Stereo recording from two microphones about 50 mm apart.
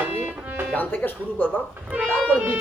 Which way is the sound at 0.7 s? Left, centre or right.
Left.